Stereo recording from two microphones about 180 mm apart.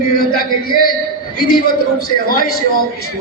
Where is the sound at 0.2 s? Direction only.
55° left (ahead or behind).